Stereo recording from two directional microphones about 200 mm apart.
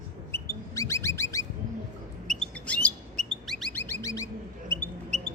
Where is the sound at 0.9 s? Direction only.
15° left (ahead or behind).